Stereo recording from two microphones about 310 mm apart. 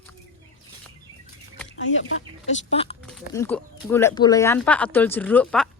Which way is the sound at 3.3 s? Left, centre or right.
Centre.